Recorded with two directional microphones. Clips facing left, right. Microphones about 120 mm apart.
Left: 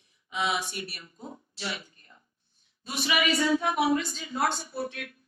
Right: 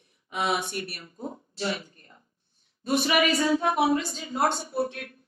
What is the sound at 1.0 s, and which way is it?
Speech, 35° right (ahead or behind).